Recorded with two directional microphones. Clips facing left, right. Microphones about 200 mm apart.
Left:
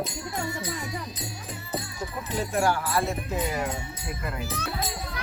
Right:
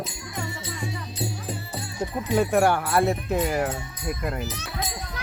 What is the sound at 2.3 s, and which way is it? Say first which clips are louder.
Speech: right 5 dB; 60° right (ahead or behind).